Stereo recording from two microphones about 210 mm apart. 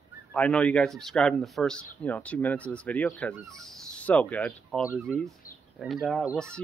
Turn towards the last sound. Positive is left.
turn(degrees=0)  # may be behind; listen again after turning